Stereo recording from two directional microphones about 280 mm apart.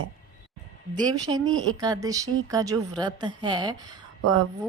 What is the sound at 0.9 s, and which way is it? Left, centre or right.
Speech, centre.